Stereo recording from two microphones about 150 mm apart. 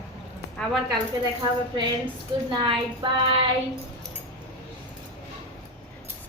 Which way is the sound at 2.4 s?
30° right (ahead or behind).